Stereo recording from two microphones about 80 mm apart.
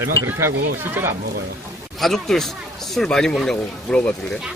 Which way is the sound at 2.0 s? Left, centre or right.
Centre.